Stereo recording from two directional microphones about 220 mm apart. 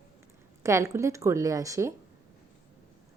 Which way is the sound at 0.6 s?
15° right (ahead or behind).